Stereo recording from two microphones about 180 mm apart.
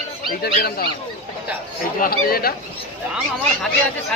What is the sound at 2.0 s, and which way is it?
Speech, 55° left (ahead or behind).